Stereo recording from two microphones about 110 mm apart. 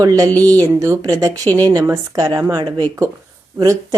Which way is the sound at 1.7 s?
25° right (ahead or behind).